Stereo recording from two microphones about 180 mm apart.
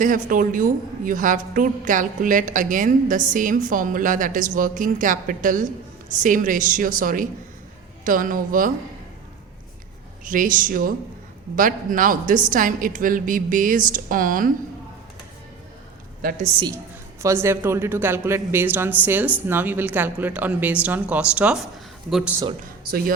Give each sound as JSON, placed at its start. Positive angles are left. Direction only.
{"t": 0.0, "sound": "a woman's voice", "side_deg": -50}
{"t": 10.2, "sound": "a woman's voice", "side_deg": -50}
{"t": 16.6, "sound": "a woman's voice", "side_deg": -20}
{"t": 22.9, "sound": "speech", "side_deg": -55}